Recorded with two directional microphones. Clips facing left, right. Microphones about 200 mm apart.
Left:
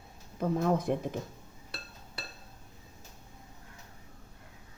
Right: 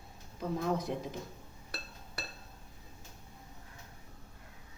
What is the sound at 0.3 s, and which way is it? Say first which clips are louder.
Speech: left 5 dB; 50° left (ahead or behind).